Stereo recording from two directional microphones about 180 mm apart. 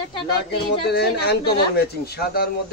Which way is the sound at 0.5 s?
65° left (ahead or behind).